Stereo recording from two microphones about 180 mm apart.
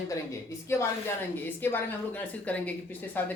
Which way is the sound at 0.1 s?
15° left (ahead or behind).